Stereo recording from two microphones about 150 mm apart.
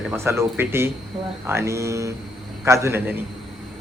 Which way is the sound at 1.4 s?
20° right (ahead or behind).